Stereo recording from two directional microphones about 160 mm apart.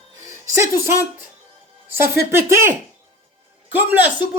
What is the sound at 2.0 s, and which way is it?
Speech, 15° right (ahead or behind).